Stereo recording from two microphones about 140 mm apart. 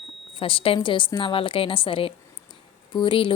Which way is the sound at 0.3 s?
40° left (ahead or behind).